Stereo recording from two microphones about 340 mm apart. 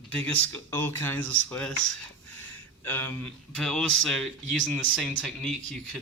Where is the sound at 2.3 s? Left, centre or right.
Centre.